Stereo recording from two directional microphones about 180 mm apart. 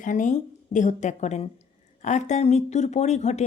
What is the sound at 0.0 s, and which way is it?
Speech, 45° left (ahead or behind).